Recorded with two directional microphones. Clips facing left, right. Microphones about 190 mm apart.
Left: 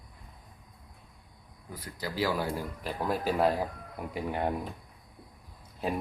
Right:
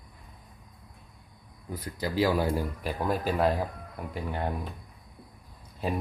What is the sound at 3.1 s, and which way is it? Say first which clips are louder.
Speech: right 1 dB; 5° left (ahead or behind).